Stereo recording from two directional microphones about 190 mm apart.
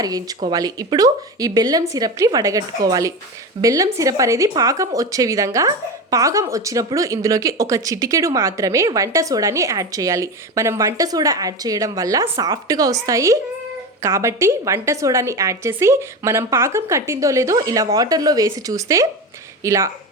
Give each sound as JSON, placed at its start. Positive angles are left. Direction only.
{"t": 0.0, "sound": "a woman's voice", "side_deg": -20}